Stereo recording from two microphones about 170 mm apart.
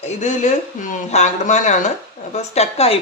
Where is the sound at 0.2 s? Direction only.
45° left (ahead or behind).